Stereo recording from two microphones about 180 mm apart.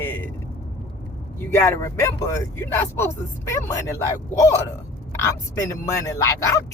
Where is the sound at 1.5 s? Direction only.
15° left (ahead or behind).